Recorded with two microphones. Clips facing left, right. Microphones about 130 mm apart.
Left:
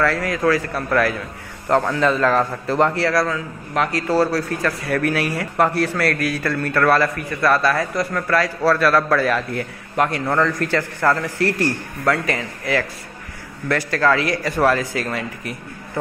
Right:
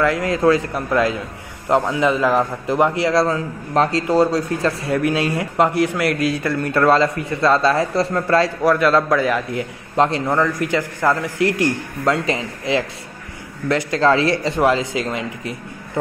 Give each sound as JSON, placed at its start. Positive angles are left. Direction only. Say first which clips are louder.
{"t": 0.0, "sound": "a man's voice", "louder": "right 3 dB", "side_deg": -20}
{"t": 3.3, "sound": "a man's voice", "louder": "right 4 dB", "side_deg": -30}
{"t": 4.1, "sound": "speech", "louder": "even", "side_deg": -20}